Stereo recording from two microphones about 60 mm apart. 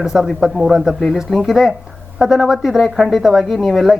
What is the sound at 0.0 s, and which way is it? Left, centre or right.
Speech, centre.